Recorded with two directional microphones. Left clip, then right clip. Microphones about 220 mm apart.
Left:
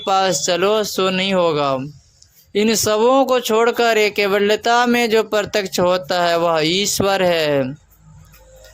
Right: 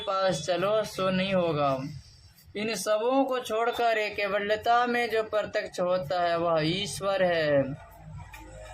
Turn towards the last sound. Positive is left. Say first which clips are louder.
# left 8 dB
turn(degrees=45)  # may be behind; listen again after turning